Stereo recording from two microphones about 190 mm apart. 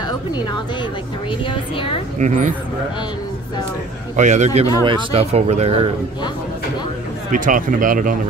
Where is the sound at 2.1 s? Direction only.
40° right (ahead or behind).